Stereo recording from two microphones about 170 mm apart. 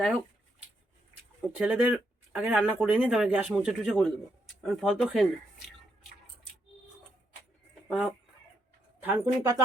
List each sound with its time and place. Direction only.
1.4 s speech: 10° right (ahead or behind)
7.9 s speech: 5° right (ahead or behind)
9.0 s speech: 20° right (ahead or behind)